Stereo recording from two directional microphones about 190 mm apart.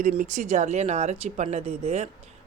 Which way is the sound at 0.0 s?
40° right (ahead or behind).